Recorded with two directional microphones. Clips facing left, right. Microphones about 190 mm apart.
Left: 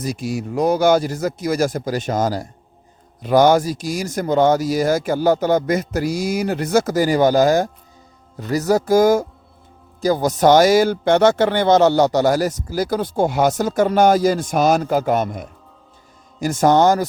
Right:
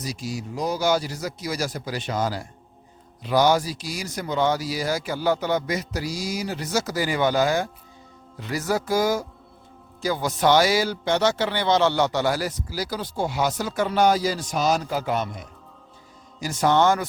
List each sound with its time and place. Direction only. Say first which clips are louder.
0.0 s a man's voice: left 7 dB; 55° left (ahead or behind); by 17.1 s 40° left (ahead or behind)